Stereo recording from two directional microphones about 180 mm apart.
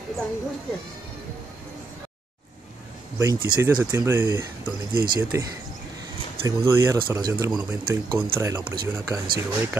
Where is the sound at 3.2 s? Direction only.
20° right (ahead or behind).